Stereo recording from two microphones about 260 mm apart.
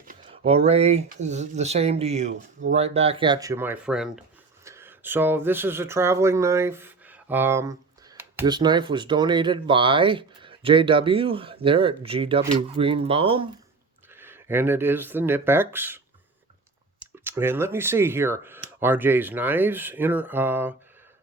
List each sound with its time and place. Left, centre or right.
0.0 s speech: right
14.1 s speech: centre
17.2 s speech: centre